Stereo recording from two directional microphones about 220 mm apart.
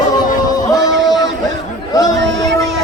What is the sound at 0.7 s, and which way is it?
Music, 15° left (ahead or behind).